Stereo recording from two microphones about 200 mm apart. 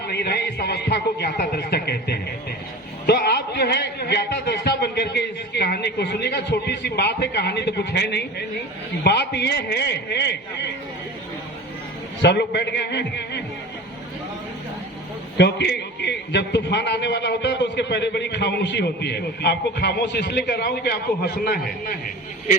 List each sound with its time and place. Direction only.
0.1 s a man's voice: 55° left (ahead or behind)
12.2 s a man's voice: 60° left (ahead or behind)
15.4 s a man's voice: 60° left (ahead or behind)